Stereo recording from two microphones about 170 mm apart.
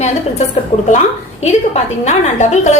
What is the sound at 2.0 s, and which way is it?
Speech, 40° left (ahead or behind).